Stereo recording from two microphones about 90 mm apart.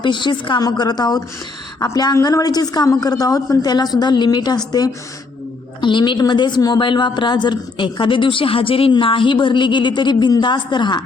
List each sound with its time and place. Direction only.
0.0 s a woman's voice: 60° left (ahead or behind)
5.8 s speech: 60° left (ahead or behind)
6.7 s speech: 65° left (ahead or behind)